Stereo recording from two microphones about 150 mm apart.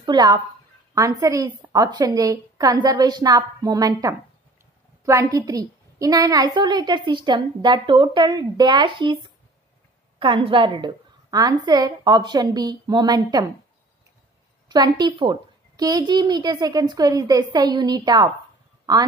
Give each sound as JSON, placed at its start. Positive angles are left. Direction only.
{"t": 0.0, "sound": "a woman's voice", "side_deg": -30}
{"t": 14.7, "sound": "a woman's voice", "side_deg": -30}